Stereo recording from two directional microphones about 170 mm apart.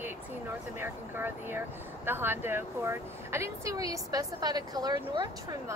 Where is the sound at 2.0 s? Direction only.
10° right (ahead or behind).